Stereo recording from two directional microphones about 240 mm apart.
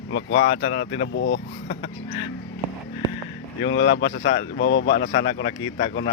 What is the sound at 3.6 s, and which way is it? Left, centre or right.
A man's voice, left.